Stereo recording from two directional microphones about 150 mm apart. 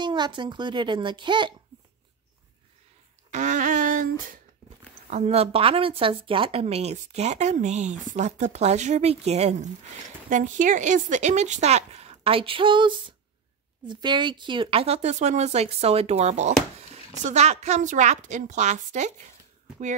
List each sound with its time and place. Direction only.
0.0 s a child's voice: 30° right (ahead or behind)
3.3 s a sound: 55° right (ahead or behind)
5.1 s speech: 45° right (ahead or behind)
10.3 s speech: 60° right (ahead or behind)